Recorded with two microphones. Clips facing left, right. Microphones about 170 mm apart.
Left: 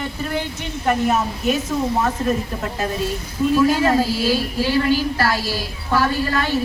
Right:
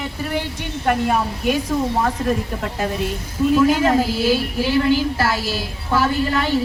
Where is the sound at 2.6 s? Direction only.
15° right (ahead or behind).